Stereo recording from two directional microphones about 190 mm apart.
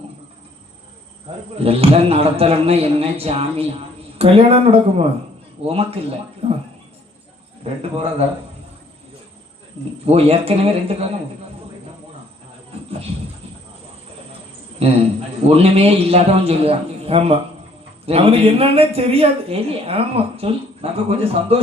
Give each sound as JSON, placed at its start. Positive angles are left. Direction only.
{"t": 1.5, "sound": "speech", "side_deg": -30}
{"t": 7.6, "sound": "speech", "side_deg": -30}
{"t": 10.1, "sound": "speech", "side_deg": -30}
{"t": 14.8, "sound": "speech", "side_deg": -35}